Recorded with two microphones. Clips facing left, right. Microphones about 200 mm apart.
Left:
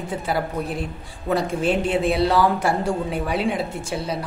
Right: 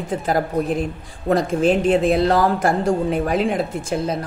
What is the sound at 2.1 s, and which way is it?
Speech, 45° right (ahead or behind).